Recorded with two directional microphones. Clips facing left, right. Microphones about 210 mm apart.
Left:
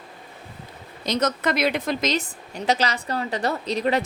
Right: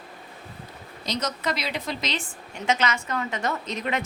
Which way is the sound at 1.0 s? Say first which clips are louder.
Left 5 dB; 55° left (ahead or behind).